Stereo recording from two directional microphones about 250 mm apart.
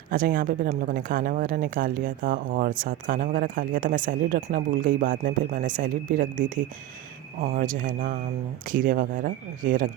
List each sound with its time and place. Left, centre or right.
0.1 s speech: right